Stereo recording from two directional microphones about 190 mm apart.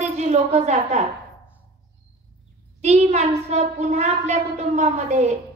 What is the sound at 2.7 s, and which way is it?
A woman's voice, 35° right (ahead or behind).